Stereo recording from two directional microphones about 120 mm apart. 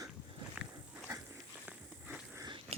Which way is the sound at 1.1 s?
30° right (ahead or behind).